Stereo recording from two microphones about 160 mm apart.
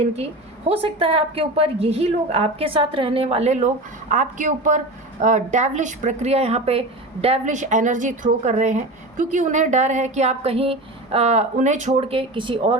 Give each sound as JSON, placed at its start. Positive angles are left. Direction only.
{"t": 0.7, "sound": "a woman's voice", "side_deg": -35}